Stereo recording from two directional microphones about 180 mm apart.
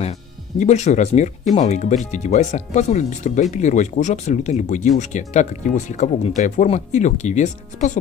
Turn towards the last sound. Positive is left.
turn(degrees=40)  # may be behind; listen again after turning